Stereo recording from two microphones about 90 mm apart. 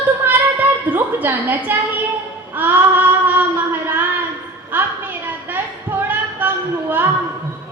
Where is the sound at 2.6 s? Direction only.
20° right (ahead or behind).